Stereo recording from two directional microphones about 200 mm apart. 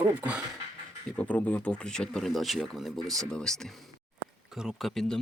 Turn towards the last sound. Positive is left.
turn(degrees=5)  # may be behind; listen again after turning